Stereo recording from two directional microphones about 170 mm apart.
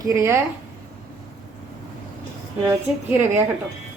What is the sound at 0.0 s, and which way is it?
Speech, 15° right (ahead or behind).